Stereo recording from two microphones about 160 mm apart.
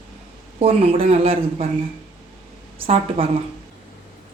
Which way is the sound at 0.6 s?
40° right (ahead or behind).